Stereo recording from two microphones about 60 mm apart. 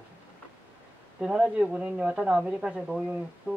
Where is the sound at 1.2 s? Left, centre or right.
Centre.